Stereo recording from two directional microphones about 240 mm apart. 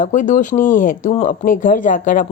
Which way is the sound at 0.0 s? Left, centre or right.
Left.